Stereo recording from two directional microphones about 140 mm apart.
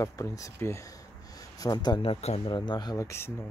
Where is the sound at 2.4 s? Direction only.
30° left (ahead or behind).